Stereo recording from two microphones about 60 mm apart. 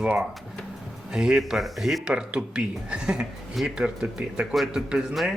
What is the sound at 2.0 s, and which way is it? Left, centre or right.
Speech, centre.